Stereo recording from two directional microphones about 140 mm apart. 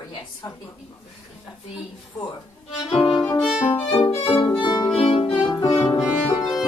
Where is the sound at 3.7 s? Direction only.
25° left (ahead or behind).